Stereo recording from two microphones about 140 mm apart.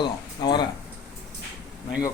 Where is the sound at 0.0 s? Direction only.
30° left (ahead or behind).